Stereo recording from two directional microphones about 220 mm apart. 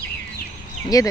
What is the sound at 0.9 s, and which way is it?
Speech, 15° left (ahead or behind).